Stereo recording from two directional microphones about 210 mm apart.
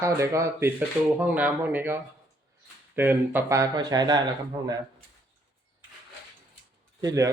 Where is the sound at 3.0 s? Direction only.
10° right (ahead or behind).